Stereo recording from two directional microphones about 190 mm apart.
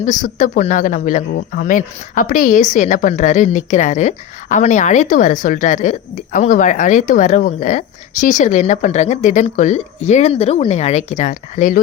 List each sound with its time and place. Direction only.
0.0 s speech: 40° left (ahead or behind)